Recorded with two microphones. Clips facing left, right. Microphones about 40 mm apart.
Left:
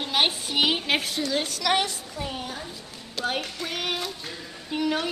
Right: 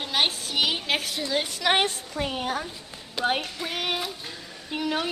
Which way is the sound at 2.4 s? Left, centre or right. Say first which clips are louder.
Right 6 dB; right.